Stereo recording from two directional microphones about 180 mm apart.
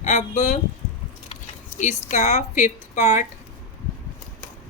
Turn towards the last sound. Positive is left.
turn(degrees=40)  # may be behind; listen again after turning